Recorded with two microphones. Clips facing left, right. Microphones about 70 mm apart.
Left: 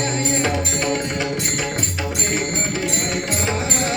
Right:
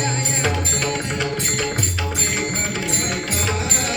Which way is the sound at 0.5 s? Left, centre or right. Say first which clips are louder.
Left 2 dB; centre.